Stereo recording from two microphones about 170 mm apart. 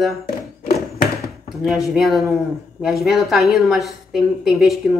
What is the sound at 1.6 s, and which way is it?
A woman's voice, centre (ahead or behind).